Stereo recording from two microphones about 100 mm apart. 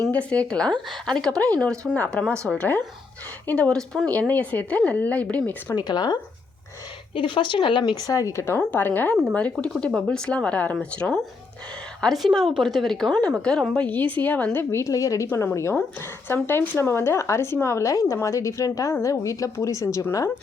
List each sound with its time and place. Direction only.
0.1 s speech: 15° left (ahead or behind)
5.9 s a woman's voice: 50° left (ahead or behind); by 8.5 s 30° left (ahead or behind)
8.5 s a woman's voice: 20° left (ahead or behind)